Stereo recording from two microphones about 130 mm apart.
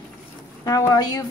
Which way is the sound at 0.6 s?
30° left (ahead or behind).